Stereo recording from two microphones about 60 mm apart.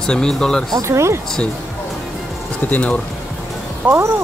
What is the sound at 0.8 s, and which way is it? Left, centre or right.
Speech, right.